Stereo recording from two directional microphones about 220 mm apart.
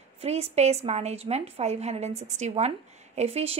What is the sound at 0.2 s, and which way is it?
A woman's voice, 30° right (ahead or behind).